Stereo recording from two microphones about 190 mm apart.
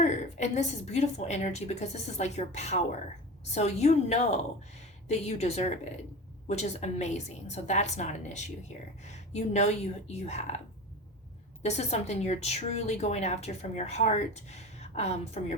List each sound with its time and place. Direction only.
0.0 s a woman's voice: 40° left (ahead or behind)
11.6 s a woman's voice: 35° left (ahead or behind)